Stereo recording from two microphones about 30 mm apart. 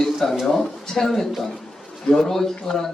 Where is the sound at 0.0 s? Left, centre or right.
Centre.